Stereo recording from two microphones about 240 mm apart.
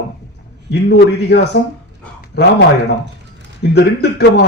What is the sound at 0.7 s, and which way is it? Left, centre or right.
A man's voice, left.